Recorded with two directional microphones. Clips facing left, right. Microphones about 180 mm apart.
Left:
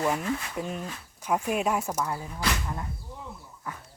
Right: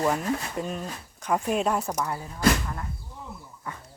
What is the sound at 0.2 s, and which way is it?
Speech, 40° right (ahead or behind).